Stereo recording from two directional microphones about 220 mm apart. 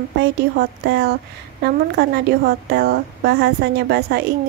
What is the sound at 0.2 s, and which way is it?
A woman's voice, 50° right (ahead or behind).